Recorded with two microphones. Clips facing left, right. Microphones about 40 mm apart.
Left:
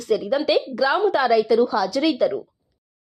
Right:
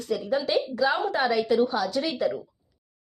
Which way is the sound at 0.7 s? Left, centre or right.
Left.